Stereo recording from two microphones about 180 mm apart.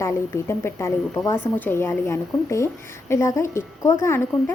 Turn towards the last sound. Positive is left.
turn(degrees=15)  # may be behind; listen again after turning